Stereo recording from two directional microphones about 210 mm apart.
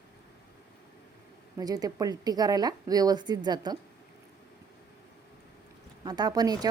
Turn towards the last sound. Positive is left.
turn(degrees=-20)  # may be behind; listen again after turning